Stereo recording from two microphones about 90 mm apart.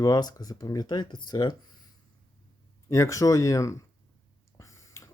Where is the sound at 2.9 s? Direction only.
35° left (ahead or behind).